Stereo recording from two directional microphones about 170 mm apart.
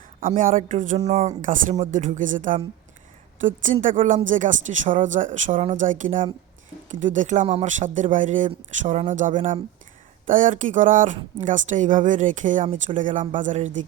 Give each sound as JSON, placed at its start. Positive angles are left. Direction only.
{"t": 0.2, "sound": "speech", "side_deg": -55}